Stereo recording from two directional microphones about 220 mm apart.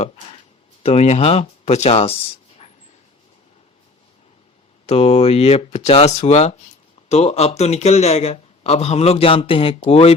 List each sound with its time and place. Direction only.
0.0 s a sound: 30° left (ahead or behind)
0.8 s speech: 30° left (ahead or behind)
4.9 s speech: 30° left (ahead or behind)